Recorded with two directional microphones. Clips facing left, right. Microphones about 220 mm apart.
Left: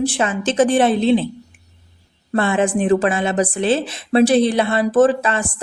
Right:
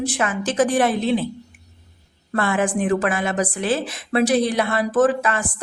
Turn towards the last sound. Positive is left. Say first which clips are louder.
# left 3 dB
turn(degrees=25)  # may be behind; listen again after turning